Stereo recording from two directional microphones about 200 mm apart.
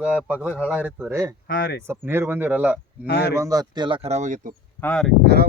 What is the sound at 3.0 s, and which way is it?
Speech, 55° left (ahead or behind).